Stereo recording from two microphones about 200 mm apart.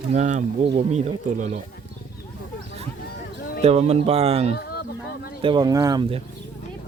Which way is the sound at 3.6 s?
30° right (ahead or behind).